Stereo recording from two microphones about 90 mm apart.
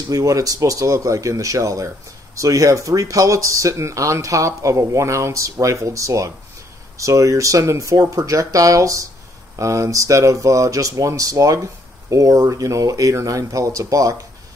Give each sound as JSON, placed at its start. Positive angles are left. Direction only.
{"t": 0.1, "sound": "speech", "side_deg": -40}